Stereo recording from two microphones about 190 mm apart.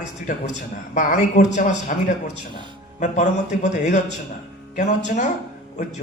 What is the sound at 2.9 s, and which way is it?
A man's voice, 40° left (ahead or behind).